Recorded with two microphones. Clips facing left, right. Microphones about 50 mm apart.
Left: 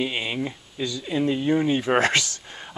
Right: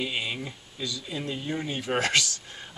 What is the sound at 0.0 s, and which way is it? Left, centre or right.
Speech, left.